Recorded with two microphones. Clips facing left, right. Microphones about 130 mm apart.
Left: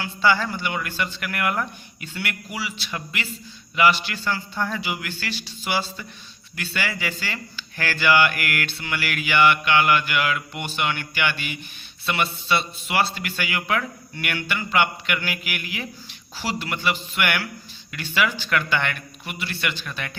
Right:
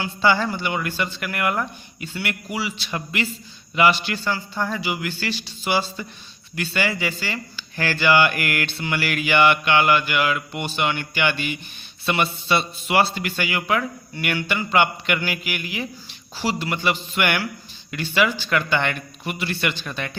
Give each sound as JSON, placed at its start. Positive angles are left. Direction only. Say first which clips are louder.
{"t": 0.0, "sound": "mantra", "louder": "right 1 dB", "side_deg": -20}
{"t": 2.2, "sound": "a man's voice", "louder": "right 4 dB", "side_deg": -15}
{"t": 2.6, "sound": "mantra", "louder": "right 3 dB", "side_deg": -30}
{"t": 4.2, "sound": "a man's voice", "louder": "right 1 dB", "side_deg": -10}
{"t": 5.6, "sound": "mantra", "louder": "right 3 dB", "side_deg": -25}
{"t": 19.8, "sound": "mantra", "louder": "right 3 dB", "side_deg": -25}